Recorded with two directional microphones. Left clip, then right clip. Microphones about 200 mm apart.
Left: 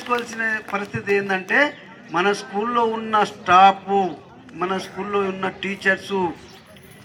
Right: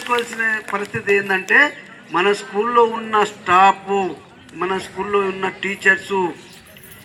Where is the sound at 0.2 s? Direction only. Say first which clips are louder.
Right 4 dB; 40° left (ahead or behind).